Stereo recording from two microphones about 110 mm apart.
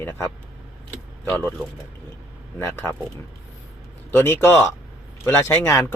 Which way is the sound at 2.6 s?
25° left (ahead or behind).